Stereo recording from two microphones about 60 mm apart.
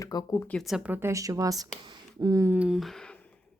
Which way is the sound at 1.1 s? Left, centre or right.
Right.